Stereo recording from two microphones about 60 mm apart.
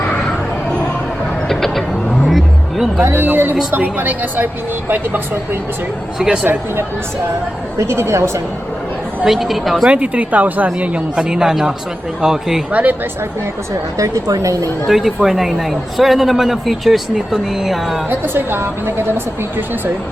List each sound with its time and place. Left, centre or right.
1.5 s vehicle: centre
3.0 s a woman's voice: right
6.1 s speech: centre
6.4 s a woman's voice: right
7.8 s speech: right
9.2 s a man's voice: centre
9.9 s a woman's voice: right; by 12.6 s centre
12.7 s a woman's voice: right
14.0 s a woman's voice: right
14.8 s a man's voice: centre
18.1 s a woman's voice: right